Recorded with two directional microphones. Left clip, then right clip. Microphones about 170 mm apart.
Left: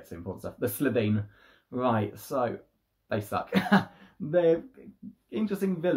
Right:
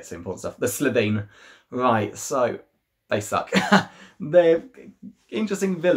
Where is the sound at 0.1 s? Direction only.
10° right (ahead or behind).